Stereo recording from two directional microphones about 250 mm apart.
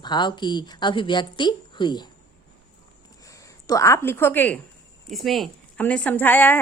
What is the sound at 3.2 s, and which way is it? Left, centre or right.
A woman's voice, centre.